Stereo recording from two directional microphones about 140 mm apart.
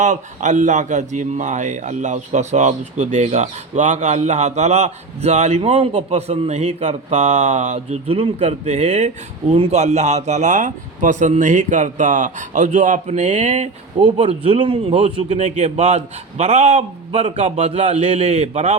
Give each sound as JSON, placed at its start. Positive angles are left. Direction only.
{"t": 0.0, "sound": "speech", "side_deg": -60}
{"t": 14.2, "sound": "a man's voice", "side_deg": -45}